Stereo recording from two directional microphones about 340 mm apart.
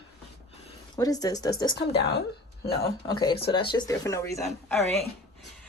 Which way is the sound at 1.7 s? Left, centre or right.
Left.